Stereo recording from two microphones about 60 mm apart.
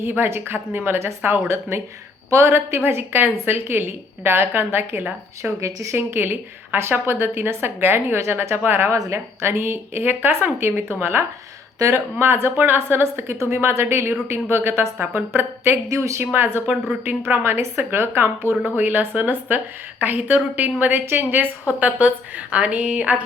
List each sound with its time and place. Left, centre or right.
0.0 s a woman's voice: right
5.4 s speech: right
6.0 s a woman's voice: right
11.8 s speech: right
12.2 s a woman's voice: right
21.8 s a woman's voice: right